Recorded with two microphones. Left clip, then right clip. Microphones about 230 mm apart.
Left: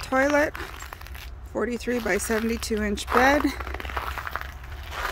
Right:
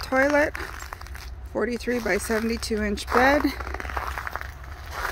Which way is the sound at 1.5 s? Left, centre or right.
Centre.